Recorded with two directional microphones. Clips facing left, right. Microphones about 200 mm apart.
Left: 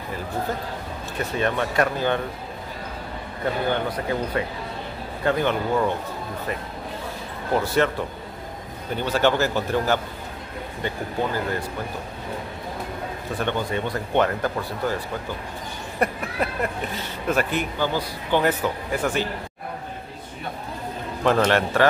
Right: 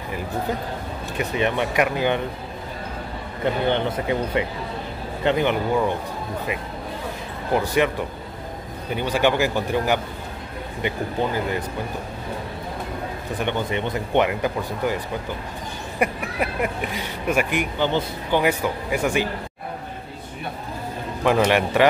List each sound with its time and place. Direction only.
1.1 s speech: 15° right (ahead or behind)
3.6 s speech: 25° right (ahead or behind)
7.5 s speech: 15° right (ahead or behind)
8.9 s speech: 15° right (ahead or behind)
13.4 s speech: 20° right (ahead or behind)
16.0 s speech: 15° right (ahead or behind)
21.2 s speech: 10° right (ahead or behind)